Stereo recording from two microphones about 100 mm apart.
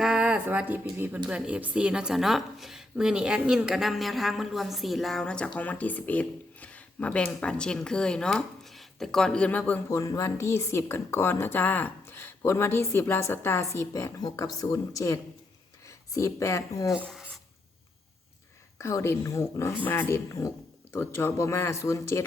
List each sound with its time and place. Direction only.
0.0 s a woman's voice: 10° right (ahead or behind); by 9.8 s 15° left (ahead or behind)
9.9 s a woman's voice: 30° left (ahead or behind)
14.2 s speech: 40° left (ahead or behind)
17.1 s rub: centre (ahead or behind)
18.8 s speech: 30° left (ahead or behind)
19.8 s a woman's voice: 20° left (ahead or behind)